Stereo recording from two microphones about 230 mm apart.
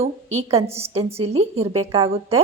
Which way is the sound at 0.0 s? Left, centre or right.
Right.